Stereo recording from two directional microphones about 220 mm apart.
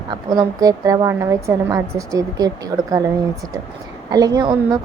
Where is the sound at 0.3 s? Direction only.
15° right (ahead or behind).